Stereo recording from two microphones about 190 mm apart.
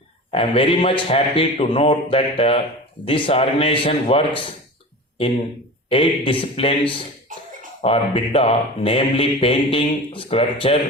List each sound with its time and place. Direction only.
0.3 s speech: 30° left (ahead or behind)
5.9 s speech: 30° left (ahead or behind)
7.8 s speech: 30° left (ahead or behind)